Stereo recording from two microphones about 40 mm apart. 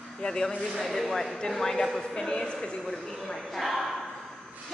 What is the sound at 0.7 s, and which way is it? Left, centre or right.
A man's voice, centre.